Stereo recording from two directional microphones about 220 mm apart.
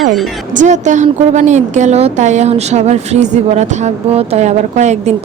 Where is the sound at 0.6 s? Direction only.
35° right (ahead or behind).